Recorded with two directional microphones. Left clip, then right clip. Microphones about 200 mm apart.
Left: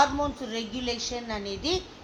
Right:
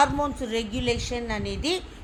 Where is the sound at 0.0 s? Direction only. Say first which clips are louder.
Right 2 dB; 60° right (ahead or behind).